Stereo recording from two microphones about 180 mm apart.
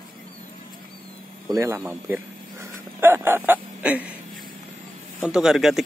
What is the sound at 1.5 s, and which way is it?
Speech, 15° right (ahead or behind).